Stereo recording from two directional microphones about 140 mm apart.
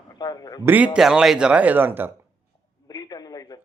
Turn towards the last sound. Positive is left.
turn(degrees=25)  # may be behind; listen again after turning